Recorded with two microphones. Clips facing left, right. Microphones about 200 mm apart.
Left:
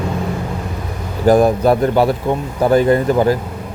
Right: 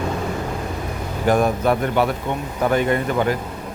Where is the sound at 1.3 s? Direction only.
35° left (ahead or behind).